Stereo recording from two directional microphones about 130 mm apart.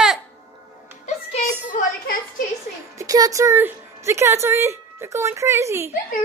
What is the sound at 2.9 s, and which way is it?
A woman's voice, 25° right (ahead or behind).